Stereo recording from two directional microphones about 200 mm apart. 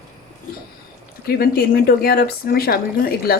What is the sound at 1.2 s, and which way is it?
Speech, 50° left (ahead or behind).